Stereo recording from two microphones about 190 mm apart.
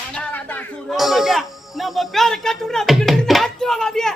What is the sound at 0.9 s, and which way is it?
A man's voice, centre (ahead or behind).